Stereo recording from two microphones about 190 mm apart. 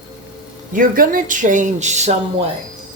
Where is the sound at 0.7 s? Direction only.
45° right (ahead or behind).